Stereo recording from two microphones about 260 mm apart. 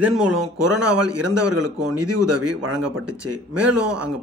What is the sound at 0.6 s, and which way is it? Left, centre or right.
A man's voice, right.